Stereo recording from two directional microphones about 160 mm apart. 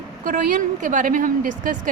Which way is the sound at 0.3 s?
50° right (ahead or behind).